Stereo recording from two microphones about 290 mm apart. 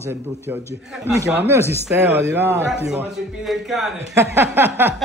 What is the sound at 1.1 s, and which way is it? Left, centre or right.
A man's voice, centre.